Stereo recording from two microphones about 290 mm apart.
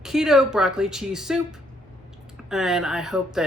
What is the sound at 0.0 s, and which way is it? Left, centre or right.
Speech, centre.